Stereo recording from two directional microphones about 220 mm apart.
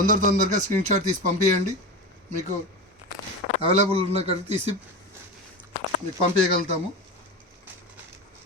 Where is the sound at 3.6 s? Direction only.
25° right (ahead or behind).